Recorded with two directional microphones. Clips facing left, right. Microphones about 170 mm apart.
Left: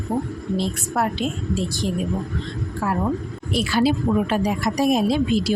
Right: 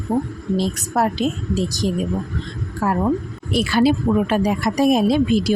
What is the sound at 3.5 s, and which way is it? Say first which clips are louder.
Speech: right 3 dB; 55° right (ahead or behind).